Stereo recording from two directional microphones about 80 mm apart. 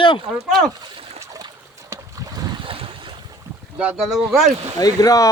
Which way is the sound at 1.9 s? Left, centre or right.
Right.